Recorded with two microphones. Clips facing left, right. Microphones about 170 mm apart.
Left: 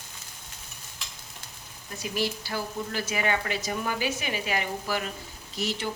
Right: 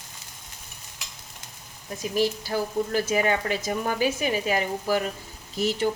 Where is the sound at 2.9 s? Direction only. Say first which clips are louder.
Right 3 dB; 40° right (ahead or behind).